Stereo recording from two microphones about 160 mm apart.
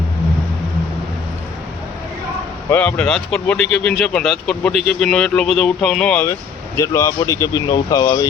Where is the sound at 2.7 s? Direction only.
10° left (ahead or behind).